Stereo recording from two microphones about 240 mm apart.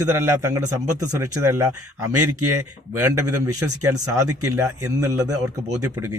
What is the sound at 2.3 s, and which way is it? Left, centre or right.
Speech, right.